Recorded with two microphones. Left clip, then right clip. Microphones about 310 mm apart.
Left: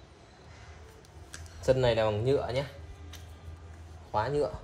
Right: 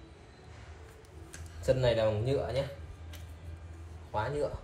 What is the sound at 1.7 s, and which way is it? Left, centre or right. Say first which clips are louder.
Speech: left 2 dB; centre.